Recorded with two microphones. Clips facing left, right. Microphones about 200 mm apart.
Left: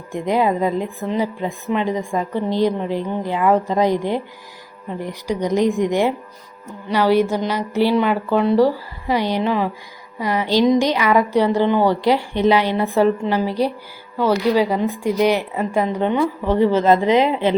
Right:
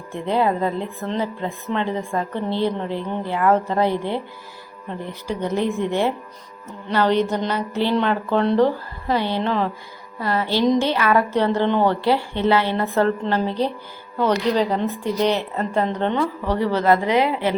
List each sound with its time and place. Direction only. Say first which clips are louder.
0.1 s a woman's voice: left 2 dB; 15° left (ahead or behind)